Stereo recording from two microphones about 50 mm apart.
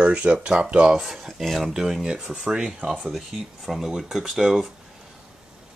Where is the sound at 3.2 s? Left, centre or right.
Centre.